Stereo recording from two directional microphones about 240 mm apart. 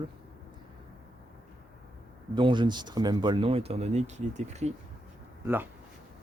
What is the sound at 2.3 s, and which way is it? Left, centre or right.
Speech, centre.